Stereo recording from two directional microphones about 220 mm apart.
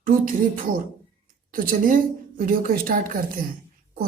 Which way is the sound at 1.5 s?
40° right (ahead or behind).